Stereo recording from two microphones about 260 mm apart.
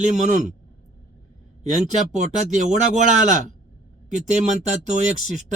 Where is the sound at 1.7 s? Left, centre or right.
Right.